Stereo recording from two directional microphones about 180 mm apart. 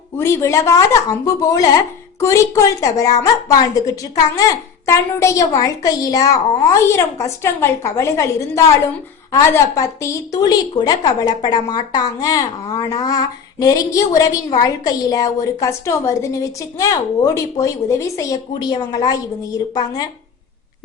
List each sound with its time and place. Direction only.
0.2 s a woman's voice: 15° left (ahead or behind)